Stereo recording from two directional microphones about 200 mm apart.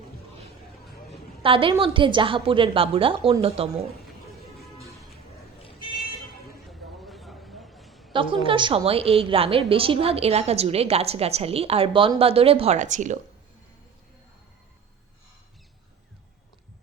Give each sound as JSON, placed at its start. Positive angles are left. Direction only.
{"t": 1.4, "sound": "a woman's voice", "side_deg": -25}
{"t": 6.7, "sound": "a sound", "side_deg": 0}
{"t": 8.1, "sound": "a woman's voice", "side_deg": -25}